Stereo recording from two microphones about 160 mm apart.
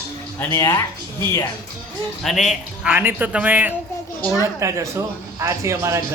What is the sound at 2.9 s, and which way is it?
A man's voice, 15° right (ahead or behind).